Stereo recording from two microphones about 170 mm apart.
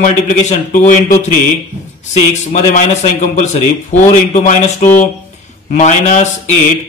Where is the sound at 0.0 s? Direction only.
50° left (ahead or behind).